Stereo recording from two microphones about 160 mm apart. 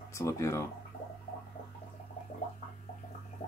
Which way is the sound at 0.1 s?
15° left (ahead or behind).